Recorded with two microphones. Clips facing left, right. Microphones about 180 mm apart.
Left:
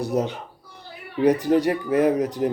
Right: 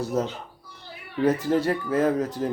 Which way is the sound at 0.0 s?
15° left (ahead or behind).